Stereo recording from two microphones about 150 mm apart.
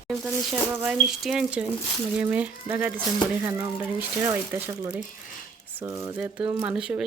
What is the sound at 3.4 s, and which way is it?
Speech, 20° right (ahead or behind).